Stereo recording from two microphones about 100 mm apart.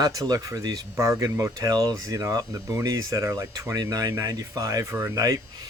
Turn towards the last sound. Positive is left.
turn(degrees=-35)  # may be behind; listen again after turning